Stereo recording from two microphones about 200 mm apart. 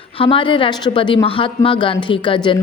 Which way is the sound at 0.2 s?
25° left (ahead or behind).